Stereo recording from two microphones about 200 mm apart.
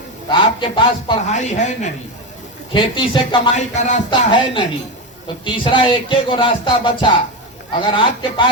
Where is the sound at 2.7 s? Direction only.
25° left (ahead or behind).